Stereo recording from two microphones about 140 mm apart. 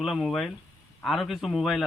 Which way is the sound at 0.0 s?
Centre (ahead or behind).